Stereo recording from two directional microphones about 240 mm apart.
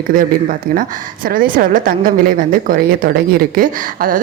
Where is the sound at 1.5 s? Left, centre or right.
Right.